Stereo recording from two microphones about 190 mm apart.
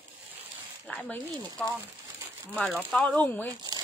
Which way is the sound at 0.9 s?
5° left (ahead or behind).